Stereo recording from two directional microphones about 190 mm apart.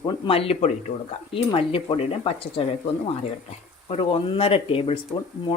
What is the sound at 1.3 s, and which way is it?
Speech, 30° left (ahead or behind).